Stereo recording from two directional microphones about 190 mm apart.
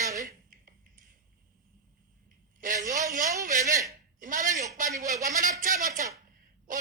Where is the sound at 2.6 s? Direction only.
45° right (ahead or behind).